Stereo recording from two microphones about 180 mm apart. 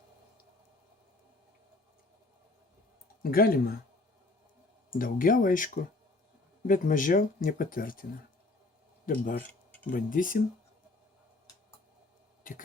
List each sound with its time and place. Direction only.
3.2 s speech: 55° left (ahead or behind)
4.9 s speech: 50° left (ahead or behind)
9.0 s speech: 50° left (ahead or behind)
12.4 s a sound: 50° left (ahead or behind)